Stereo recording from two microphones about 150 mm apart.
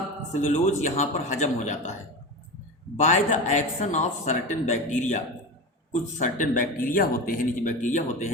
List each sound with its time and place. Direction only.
0.3 s speech: 55° left (ahead or behind)
3.0 s speech: 55° left (ahead or behind)